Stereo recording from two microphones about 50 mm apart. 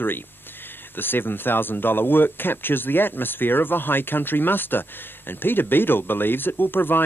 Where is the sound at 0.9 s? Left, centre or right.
Left.